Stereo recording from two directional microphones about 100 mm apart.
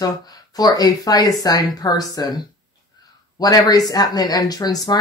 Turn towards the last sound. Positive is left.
turn(degrees=40)  # may be behind; listen again after turning